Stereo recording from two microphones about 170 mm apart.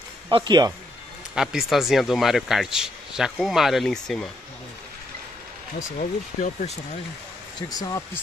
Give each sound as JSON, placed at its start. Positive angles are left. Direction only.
{"t": 0.3, "sound": "speech", "side_deg": -25}
{"t": 1.3, "sound": "speech", "side_deg": -5}
{"t": 5.9, "sound": "speech", "side_deg": 50}
{"t": 7.7, "sound": "speech", "side_deg": 20}